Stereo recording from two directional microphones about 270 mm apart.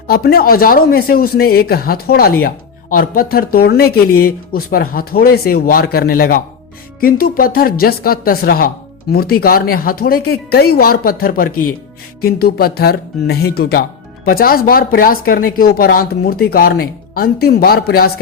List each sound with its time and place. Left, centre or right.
0.1 s speech: left